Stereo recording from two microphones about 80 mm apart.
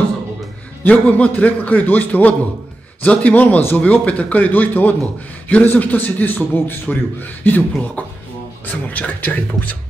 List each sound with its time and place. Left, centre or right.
0.8 s a man's voice: centre
8.6 s a man's voice: centre